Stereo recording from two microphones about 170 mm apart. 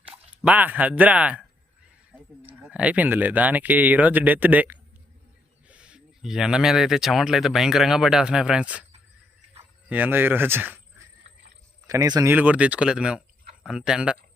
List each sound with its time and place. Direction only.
0.4 s speech: 10° right (ahead or behind)
9.9 s speech: 10° right (ahead or behind)
12.3 s speech: 10° right (ahead or behind)